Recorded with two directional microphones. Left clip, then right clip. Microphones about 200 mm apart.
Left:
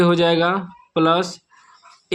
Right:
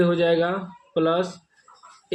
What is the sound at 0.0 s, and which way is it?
Speech, 40° left (ahead or behind).